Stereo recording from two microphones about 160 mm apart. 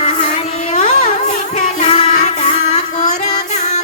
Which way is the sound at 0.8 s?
50° left (ahead or behind).